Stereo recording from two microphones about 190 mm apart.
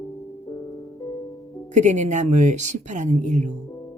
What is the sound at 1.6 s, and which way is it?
Speech, 40° right (ahead or behind).